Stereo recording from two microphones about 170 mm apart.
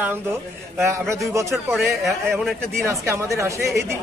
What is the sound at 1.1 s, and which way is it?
Speech, 15° right (ahead or behind).